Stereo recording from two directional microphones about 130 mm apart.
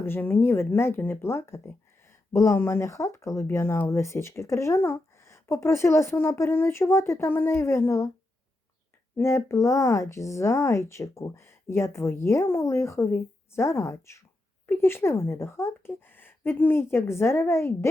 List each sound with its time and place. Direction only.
0.0 s speech: 15° left (ahead or behind)
9.1 s speech: 20° left (ahead or behind)